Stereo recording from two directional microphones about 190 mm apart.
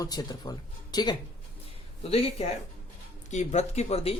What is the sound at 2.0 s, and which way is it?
Speech, 30° left (ahead or behind).